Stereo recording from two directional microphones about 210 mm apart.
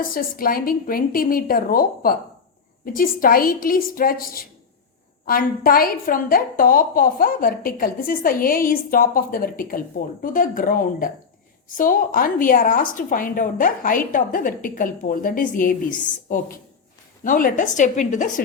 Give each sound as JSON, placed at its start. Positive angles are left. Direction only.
{"t": 0.0, "sound": "a woman's voice", "side_deg": 45}